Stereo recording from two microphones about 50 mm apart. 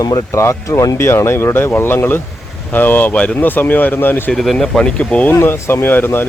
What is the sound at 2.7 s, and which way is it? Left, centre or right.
Speech, left.